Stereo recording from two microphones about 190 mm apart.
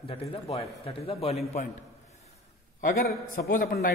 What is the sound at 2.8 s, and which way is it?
A man's voice, 45° left (ahead or behind).